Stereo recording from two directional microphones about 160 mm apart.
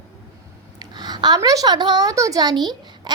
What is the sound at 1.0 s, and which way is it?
A woman's voice, 25° right (ahead or behind).